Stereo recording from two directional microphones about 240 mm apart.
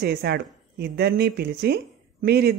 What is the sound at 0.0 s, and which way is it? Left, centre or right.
Speech, right.